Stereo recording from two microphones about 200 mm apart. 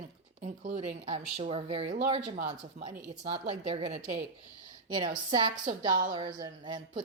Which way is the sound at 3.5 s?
30° right (ahead or behind).